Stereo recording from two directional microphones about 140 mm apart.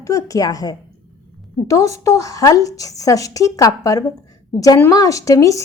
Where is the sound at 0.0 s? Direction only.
25° left (ahead or behind).